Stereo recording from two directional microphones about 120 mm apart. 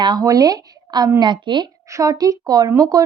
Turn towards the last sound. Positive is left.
turn(degrees=-30)  # may be behind; listen again after turning